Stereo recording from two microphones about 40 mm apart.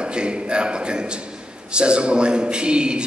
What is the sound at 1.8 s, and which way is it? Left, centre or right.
A man's voice, right.